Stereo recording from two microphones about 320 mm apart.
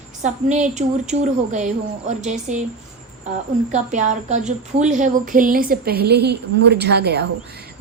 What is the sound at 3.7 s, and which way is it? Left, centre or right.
A woman's voice, right.